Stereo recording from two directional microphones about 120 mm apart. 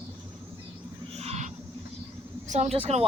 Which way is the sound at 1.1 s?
65° right (ahead or behind).